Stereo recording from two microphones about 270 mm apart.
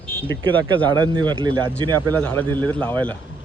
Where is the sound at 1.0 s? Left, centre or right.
Centre.